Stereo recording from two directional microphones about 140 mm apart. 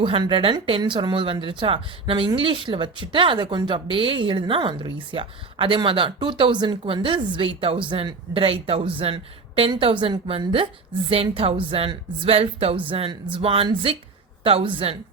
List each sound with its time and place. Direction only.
0.0 s a woman's voice: 40° right (ahead or behind)